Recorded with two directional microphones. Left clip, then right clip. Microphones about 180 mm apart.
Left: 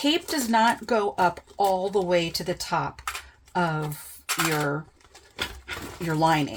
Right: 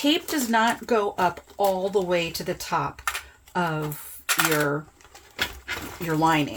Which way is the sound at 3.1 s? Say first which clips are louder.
Right 4 dB; 5° right (ahead or behind).